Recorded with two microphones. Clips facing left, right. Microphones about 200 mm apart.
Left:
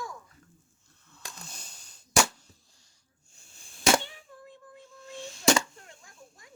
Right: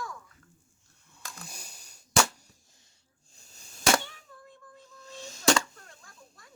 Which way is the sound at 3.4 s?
40° right (ahead or behind).